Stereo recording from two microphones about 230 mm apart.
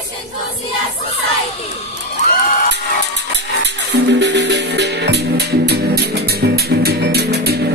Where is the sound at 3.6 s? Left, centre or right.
Right.